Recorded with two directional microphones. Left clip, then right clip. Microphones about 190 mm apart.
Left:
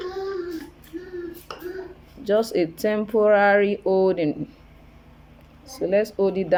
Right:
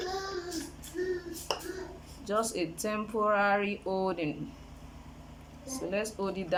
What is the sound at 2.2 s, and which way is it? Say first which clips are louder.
Speech: left 10 dB; 30° left (ahead or behind).